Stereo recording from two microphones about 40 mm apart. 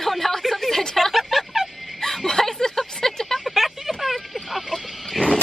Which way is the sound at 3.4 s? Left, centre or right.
Centre.